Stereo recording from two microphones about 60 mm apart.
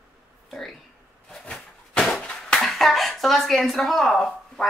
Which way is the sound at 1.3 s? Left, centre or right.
Centre.